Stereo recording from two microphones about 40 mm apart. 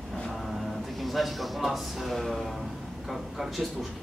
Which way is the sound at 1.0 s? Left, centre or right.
Centre.